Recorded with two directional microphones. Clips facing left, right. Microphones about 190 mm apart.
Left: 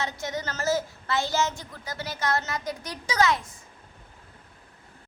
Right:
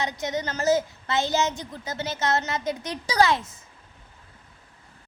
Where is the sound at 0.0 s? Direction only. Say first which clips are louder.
Right 3 dB; 15° right (ahead or behind).